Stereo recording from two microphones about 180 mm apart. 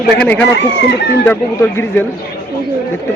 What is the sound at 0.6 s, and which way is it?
Speech, 75° left (ahead or behind).